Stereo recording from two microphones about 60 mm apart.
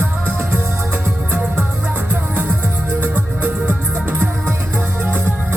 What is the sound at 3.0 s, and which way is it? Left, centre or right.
Music, right.